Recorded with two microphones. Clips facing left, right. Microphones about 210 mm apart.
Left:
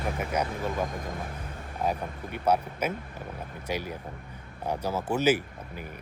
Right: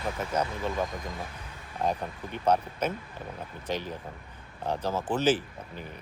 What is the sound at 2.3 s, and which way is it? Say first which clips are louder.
Speech: even; 10° left (ahead or behind).